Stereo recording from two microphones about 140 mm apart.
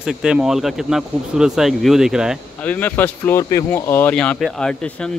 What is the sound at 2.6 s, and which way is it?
Speech, 15° left (ahead or behind).